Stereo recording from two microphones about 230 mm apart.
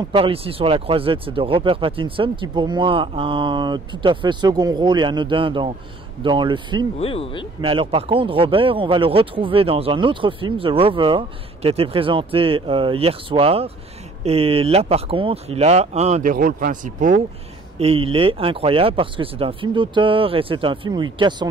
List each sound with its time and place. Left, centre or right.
0.1 s speech: right
7.0 s speech: left
7.6 s speech: right